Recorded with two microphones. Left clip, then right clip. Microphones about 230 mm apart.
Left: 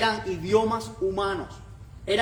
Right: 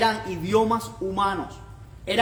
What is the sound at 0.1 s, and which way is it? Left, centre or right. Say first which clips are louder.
Music: even; right.